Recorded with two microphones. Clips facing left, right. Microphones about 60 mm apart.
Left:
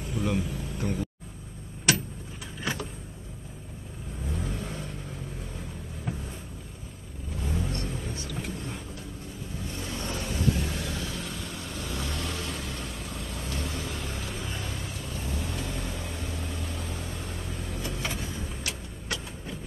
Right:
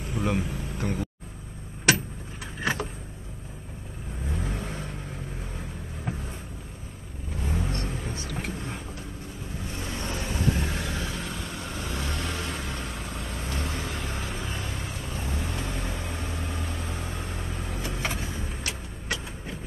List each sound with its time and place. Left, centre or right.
0.1 s vehicle: right
2.4 s vehicle: right
4.3 s vehicle: right
7.3 s vehicle: right
8.3 s vehicle: right
9.7 s vehicle: right
10.5 s vehicle: right